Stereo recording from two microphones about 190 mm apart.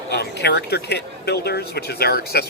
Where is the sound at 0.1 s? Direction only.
60° left (ahead or behind).